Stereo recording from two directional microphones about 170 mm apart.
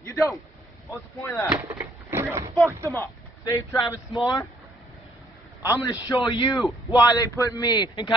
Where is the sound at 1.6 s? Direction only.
15° right (ahead or behind).